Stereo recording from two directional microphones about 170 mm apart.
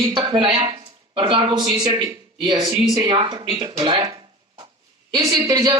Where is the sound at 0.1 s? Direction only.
30° right (ahead or behind).